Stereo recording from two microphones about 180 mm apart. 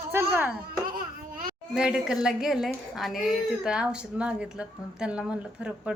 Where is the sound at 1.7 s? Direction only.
5° right (ahead or behind).